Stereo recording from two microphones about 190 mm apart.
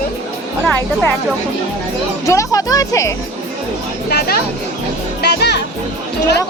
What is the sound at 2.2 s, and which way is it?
Speech, 15° left (ahead or behind).